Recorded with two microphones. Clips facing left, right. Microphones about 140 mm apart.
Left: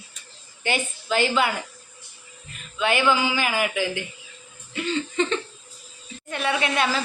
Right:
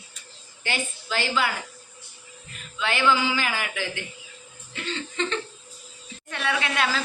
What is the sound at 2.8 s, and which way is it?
Speech, 15° left (ahead or behind).